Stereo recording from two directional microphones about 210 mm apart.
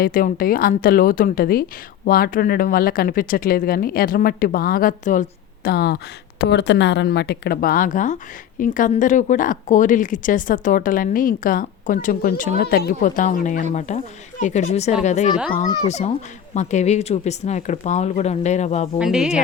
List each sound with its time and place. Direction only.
0.0 s speech: 40° left (ahead or behind)
5.6 s speech: 50° left (ahead or behind); by 15.3 s 35° left (ahead or behind)
15.5 s speech: 20° left (ahead or behind)
15.9 s speech: 30° left (ahead or behind)
18.9 s speech: 5° right (ahead or behind)